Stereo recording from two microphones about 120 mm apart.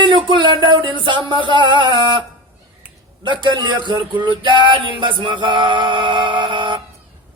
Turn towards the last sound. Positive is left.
turn(degrees=-40)  # may be behind; listen again after turning